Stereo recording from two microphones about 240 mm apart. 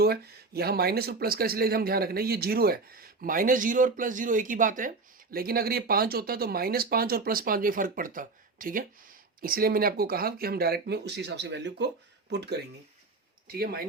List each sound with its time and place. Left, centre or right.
0.0 s speech: right